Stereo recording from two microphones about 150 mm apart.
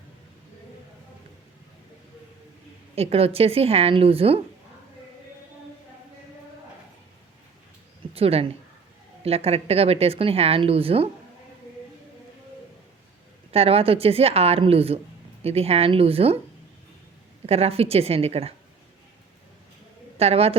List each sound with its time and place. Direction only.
2.9 s speech: 40° right (ahead or behind)
8.1 s a woman's voice: 40° right (ahead or behind)
13.5 s speech: 40° right (ahead or behind)
17.4 s speech: 40° right (ahead or behind)
20.1 s speech: 40° right (ahead or behind)